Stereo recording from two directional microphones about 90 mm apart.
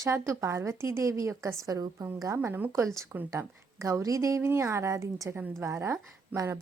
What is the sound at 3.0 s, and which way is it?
Speech, 20° right (ahead or behind).